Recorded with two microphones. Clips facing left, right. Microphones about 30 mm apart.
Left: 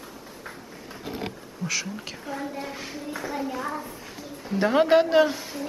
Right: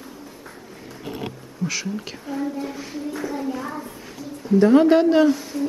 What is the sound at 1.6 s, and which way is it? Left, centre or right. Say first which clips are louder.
A woman's voice: right 3 dB; centre.